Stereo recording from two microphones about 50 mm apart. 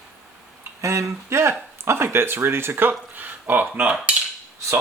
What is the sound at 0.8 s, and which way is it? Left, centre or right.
Speech, right.